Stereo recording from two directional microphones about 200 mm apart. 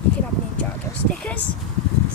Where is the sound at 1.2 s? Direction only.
5° left (ahead or behind).